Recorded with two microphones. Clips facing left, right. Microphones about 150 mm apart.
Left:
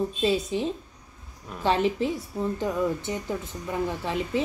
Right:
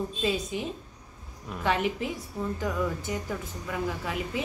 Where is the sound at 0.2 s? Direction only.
30° left (ahead or behind).